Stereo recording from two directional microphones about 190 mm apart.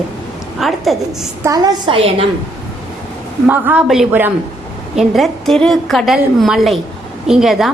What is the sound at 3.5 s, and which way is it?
A woman's voice, 10° right (ahead or behind).